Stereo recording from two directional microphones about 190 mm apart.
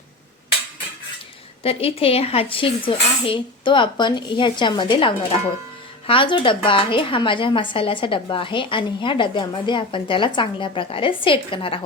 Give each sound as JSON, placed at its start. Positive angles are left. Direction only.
{"t": 1.6, "sound": "a woman's voice", "side_deg": 30}